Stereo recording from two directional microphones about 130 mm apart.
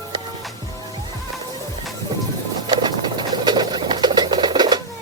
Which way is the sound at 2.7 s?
35° right (ahead or behind).